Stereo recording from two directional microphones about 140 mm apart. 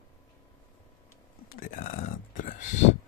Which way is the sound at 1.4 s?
85° left.